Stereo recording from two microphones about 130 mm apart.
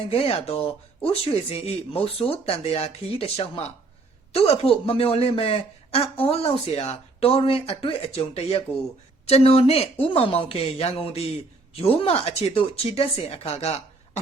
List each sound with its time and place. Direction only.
0.1 s a man's voice: 45° left (ahead or behind)